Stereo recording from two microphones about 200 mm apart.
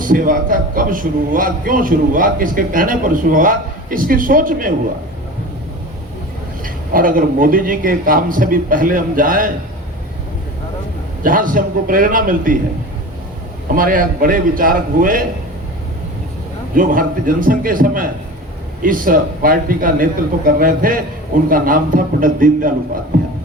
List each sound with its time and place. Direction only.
0.0 s a man's voice: 45° right (ahead or behind)
6.9 s a man's voice: 45° right (ahead or behind)
11.2 s a man's voice: 45° right (ahead or behind)
13.7 s a man's voice: 45° right (ahead or behind)
16.7 s a man's voice: 45° right (ahead or behind)